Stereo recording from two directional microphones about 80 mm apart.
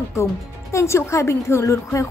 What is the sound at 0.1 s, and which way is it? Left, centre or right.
Speech, left.